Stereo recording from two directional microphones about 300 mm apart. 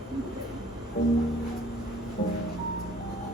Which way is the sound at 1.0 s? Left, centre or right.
Left.